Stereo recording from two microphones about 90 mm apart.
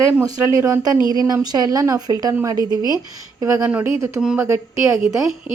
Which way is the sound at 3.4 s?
35° right (ahead or behind).